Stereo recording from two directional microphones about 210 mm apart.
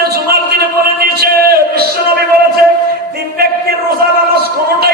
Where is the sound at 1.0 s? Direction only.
45° right (ahead or behind).